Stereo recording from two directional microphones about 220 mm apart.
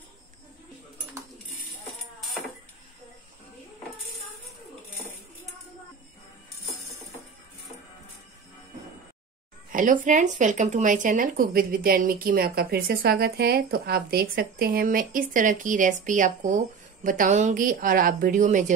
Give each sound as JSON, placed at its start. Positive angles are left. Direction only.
{"t": 1.6, "sound": "music", "side_deg": 0}
{"t": 9.7, "sound": "speech", "side_deg": -35}